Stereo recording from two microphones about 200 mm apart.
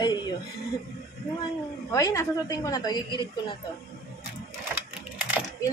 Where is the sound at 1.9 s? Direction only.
15° left (ahead or behind).